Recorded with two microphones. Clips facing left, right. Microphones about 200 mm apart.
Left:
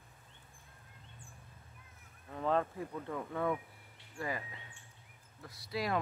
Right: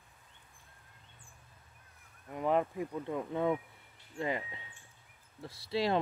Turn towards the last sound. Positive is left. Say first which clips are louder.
# right 4 dB
turn(degrees=-30)  # may be behind; listen again after turning